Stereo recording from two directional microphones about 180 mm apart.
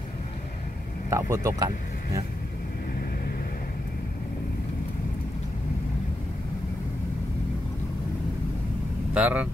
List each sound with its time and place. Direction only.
1.1 s speech: 15° right (ahead or behind)
9.1 s speech: 5° right (ahead or behind)